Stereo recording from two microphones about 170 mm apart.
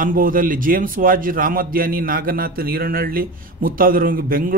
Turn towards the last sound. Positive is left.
turn(degrees=-55)  # may be behind; listen again after turning